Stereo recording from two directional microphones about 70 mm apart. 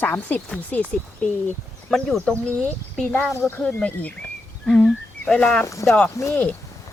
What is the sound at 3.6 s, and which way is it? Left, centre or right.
Speech, centre.